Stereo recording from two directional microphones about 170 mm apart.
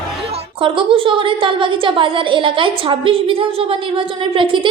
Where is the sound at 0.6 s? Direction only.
30° right (ahead or behind).